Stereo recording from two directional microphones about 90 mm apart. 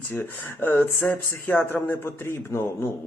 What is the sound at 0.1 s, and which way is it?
Speech, 20° left (ahead or behind).